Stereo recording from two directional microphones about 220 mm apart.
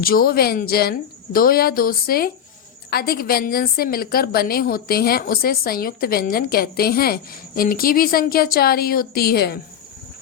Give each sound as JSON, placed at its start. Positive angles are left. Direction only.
{"t": 0.0, "sound": "a woman's voice", "side_deg": 40}